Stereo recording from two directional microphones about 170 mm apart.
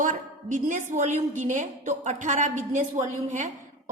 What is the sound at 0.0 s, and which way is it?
A woman's voice, 50° right (ahead or behind).